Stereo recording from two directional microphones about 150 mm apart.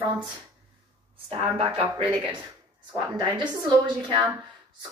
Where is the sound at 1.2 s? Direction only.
40° right (ahead or behind).